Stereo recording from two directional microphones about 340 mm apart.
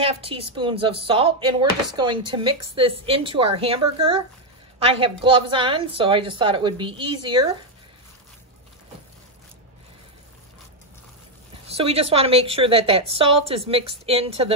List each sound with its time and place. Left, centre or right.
0.0 s speech: centre
11.6 s speech: centre